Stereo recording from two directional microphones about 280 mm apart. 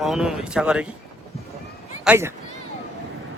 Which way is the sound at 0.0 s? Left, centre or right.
Centre.